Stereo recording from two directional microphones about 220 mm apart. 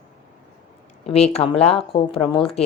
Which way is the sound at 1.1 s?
30° left (ahead or behind).